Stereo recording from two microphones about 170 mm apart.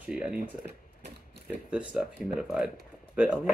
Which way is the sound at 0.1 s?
5° right (ahead or behind).